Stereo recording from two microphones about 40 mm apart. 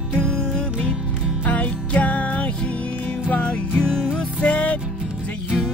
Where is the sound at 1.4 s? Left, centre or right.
Left.